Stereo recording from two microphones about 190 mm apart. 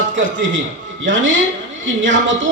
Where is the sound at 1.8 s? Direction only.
80° right.